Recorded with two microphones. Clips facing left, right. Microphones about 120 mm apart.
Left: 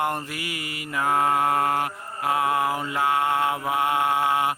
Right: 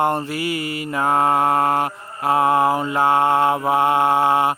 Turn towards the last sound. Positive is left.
turn(degrees=-30)  # may be behind; listen again after turning